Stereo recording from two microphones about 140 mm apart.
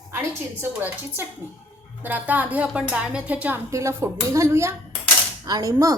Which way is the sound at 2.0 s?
10° right (ahead or behind).